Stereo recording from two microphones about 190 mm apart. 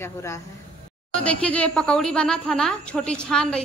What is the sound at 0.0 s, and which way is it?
Speech, 15° left (ahead or behind).